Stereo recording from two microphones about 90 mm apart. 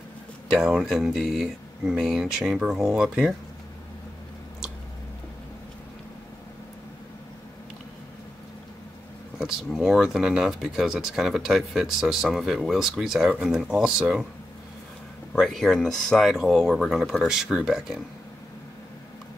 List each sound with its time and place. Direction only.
0.5 s speech: 10° right (ahead or behind)
9.4 s speech: 5° right (ahead or behind)
15.3 s speech: 5° left (ahead or behind)